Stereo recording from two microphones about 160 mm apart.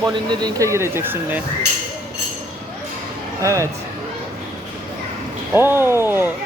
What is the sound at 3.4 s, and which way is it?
Speech, 20° right (ahead or behind).